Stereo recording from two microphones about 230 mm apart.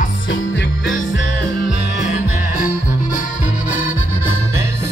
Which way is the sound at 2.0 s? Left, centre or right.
Left.